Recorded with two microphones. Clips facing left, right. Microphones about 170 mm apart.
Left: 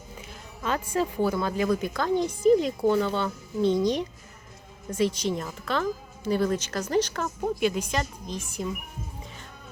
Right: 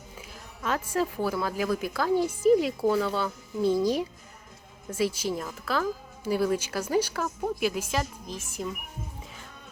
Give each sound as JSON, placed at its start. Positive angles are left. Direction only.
{"t": 0.2, "sound": "speech", "side_deg": 0}